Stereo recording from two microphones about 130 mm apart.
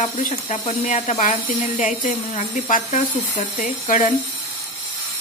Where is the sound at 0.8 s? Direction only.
75° left (ahead or behind).